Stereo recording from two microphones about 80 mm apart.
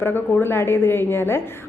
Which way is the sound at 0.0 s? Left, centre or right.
Left.